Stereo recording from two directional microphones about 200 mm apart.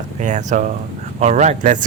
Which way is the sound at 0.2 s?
35° right (ahead or behind).